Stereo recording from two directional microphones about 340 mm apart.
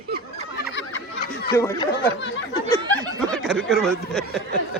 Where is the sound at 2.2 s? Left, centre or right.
Left.